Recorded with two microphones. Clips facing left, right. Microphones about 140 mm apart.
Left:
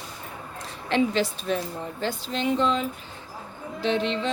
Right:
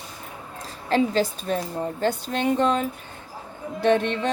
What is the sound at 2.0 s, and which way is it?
Speech, 50° right (ahead or behind).